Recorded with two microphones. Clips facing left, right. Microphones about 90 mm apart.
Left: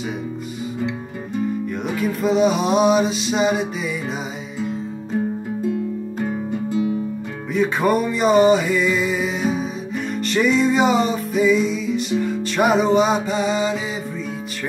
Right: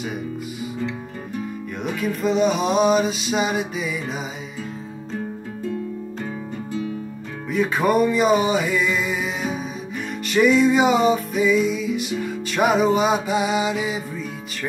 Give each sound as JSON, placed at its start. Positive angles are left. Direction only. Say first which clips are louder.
{"t": 1.9, "sound": "music", "louder": "left 1 dB", "side_deg": 0}
{"t": 6.1, "sound": "guitar", "louder": "left 6 dB", "side_deg": 10}
{"t": 7.5, "sound": "music", "louder": "left 1 dB", "side_deg": 0}